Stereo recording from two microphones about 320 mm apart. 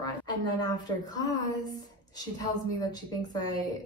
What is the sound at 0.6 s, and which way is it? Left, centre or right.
A woman's voice, centre.